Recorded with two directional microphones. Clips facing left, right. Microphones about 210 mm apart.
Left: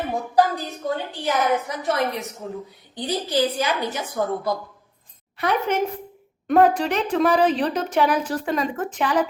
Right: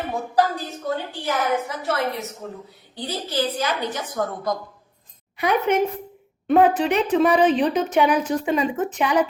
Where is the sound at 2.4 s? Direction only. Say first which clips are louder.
Left 3 dB; 10° left (ahead or behind).